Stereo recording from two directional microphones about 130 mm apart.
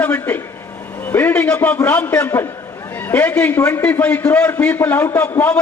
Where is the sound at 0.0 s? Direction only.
15° left (ahead or behind).